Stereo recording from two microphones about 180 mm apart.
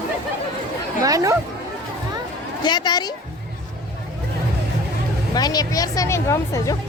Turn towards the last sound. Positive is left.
turn(degrees=15)  # may be behind; listen again after turning